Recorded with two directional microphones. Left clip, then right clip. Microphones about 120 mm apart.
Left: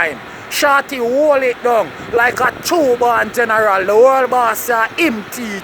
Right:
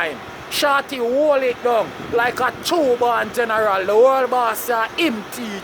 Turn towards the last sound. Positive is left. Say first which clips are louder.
# left 4 dB
turn(degrees=40)  # may be behind; listen again after turning